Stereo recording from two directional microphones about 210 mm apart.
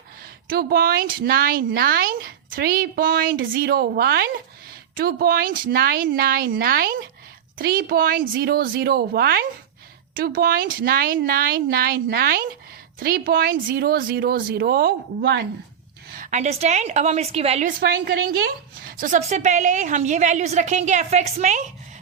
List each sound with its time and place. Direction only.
0.5 s a woman's voice: 45° right (ahead or behind)
16.1 s a woman's voice: 35° right (ahead or behind)